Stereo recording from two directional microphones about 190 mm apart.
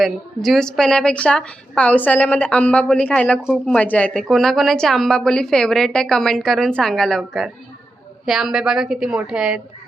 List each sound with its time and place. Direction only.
0.0 s a woman's voice: centre (ahead or behind)